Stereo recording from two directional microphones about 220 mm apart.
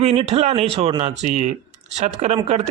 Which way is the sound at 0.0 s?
25° right (ahead or behind).